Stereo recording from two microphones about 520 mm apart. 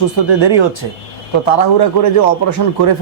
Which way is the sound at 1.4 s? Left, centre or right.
Left.